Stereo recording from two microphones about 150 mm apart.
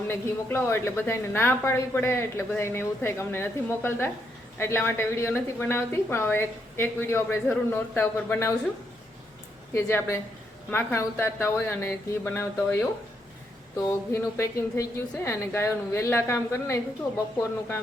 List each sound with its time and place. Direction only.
0.1 s a woman's voice: 15° left (ahead or behind)
9.7 s a woman's voice: 15° left (ahead or behind)